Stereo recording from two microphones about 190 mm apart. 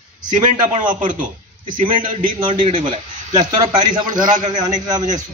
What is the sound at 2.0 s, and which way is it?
A man's voice, 25° right (ahead or behind).